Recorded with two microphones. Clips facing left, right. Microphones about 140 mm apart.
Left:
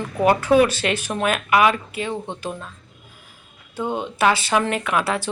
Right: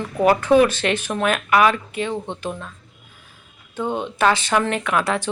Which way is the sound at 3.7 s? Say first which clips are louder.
Right 1 dB; 10° left (ahead or behind).